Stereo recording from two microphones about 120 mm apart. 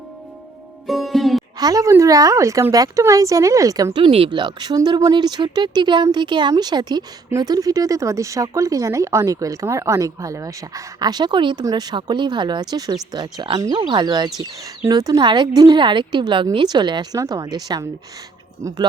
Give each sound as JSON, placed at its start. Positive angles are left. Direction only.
{"t": 0.9, "sound": "music", "side_deg": 0}
{"t": 1.5, "sound": "speech", "side_deg": -30}
{"t": 3.9, "sound": "speech", "side_deg": -45}